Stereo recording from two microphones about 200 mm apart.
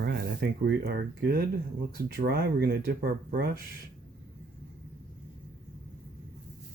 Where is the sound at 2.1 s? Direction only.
50° right (ahead or behind).